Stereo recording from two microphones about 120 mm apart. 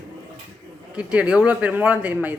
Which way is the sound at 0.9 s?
10° right (ahead or behind).